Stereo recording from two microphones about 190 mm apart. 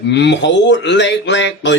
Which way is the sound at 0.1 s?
65° left (ahead or behind).